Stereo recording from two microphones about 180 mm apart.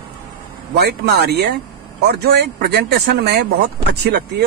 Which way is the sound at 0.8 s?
70° right (ahead or behind).